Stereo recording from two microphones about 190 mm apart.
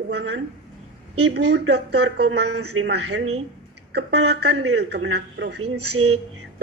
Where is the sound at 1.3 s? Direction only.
65° right (ahead or behind); by 3.4 s 90° right.